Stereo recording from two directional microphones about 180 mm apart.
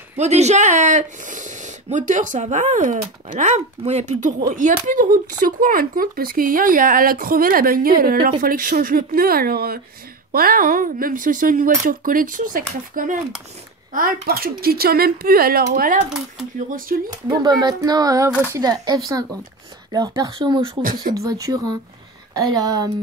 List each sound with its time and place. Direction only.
0.2 s speech: 40° right (ahead or behind)
5.4 s speech: 50° right (ahead or behind)
17.3 s speech: 20° right (ahead or behind)